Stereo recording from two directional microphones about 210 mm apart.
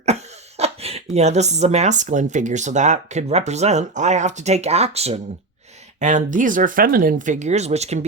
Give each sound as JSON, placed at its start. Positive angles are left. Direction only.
{"t": 0.0, "sound": "speech", "side_deg": -30}